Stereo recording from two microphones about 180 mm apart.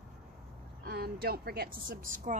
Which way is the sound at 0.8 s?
55° right (ahead or behind).